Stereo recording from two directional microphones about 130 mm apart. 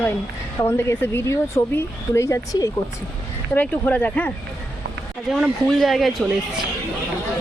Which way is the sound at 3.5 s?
15° left (ahead or behind).